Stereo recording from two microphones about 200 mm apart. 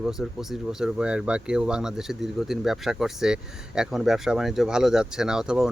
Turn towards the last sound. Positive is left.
turn(degrees=-5)  # may be behind; listen again after turning